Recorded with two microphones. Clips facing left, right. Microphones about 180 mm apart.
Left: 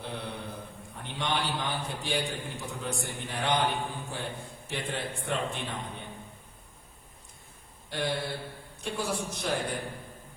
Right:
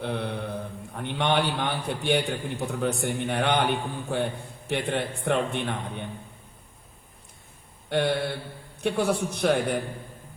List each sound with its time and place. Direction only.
0.0 s mantra: 65° right (ahead or behind)
0.9 s a man's voice: 65° right (ahead or behind)
7.9 s a man's voice: 65° right (ahead or behind)